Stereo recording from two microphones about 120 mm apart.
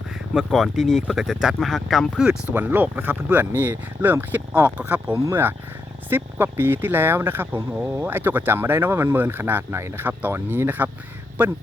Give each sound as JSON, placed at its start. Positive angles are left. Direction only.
{"t": 0.3, "sound": "speech", "side_deg": 0}